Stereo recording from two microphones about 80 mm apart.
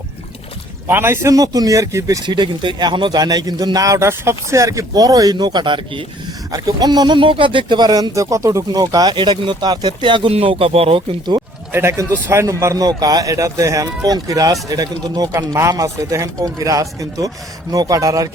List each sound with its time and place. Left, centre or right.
0.9 s a man's voice: right
2.2 s speech: right
3.2 s a man's voice: right
6.5 s speech: right
8.1 s speech: right
8.7 s speech: right
9.1 s speech: right
11.7 s speech: right
12.8 s a man's voice: right